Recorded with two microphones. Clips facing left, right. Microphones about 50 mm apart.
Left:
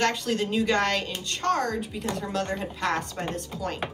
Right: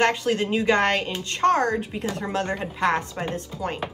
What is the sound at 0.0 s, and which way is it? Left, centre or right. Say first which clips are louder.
A woman's voice: right 4 dB; right.